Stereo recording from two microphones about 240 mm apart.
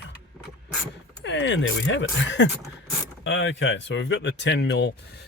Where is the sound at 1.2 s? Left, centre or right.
Left.